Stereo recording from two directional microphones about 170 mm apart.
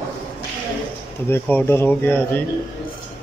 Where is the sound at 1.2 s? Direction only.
15° left (ahead or behind).